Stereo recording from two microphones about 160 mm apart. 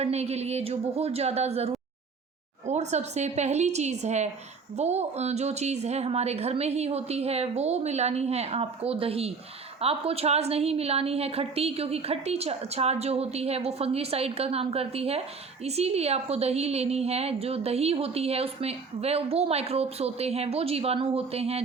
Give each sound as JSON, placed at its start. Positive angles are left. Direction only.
{"t": 0.0, "sound": "a woman's voice", "side_deg": -40}